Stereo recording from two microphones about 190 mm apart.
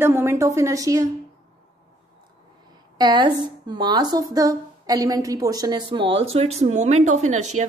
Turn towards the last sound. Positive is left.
turn(degrees=-40)  # may be behind; listen again after turning